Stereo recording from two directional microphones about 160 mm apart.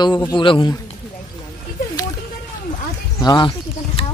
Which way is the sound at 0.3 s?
30° left (ahead or behind).